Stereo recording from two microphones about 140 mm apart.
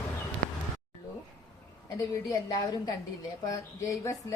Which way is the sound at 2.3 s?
25° left (ahead or behind).